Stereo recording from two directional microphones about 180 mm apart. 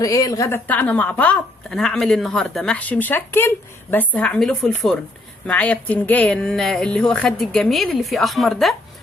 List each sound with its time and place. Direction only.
0.0 s a woman's voice: 20° left (ahead or behind); by 8.7 s centre (ahead or behind)